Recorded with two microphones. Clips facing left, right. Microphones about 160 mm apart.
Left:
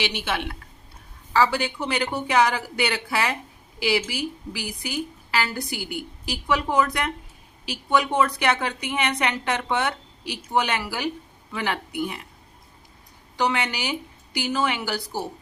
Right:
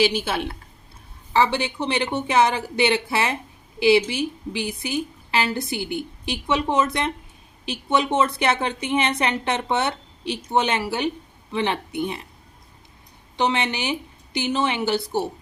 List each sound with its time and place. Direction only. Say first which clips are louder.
0.0 s a woman's voice: right 6 dB; 35° right (ahead or behind)
1.3 s a woman's voice: right 1 dB; 25° right (ahead or behind)
13.3 s a woman's voice: right 2 dB; 25° right (ahead or behind)